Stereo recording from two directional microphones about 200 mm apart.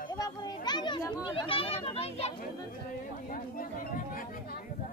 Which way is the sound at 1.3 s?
25° left (ahead or behind).